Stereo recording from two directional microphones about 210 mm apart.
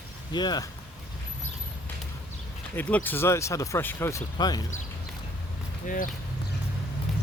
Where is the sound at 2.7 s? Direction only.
10° left (ahead or behind).